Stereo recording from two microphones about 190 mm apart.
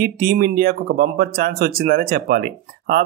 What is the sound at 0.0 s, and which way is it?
Speech, 50° right (ahead or behind).